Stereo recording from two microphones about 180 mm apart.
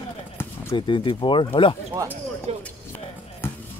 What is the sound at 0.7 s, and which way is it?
Speech, 25° left (ahead or behind).